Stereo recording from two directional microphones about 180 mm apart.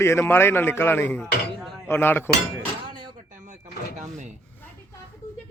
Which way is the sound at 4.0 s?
40° right (ahead or behind).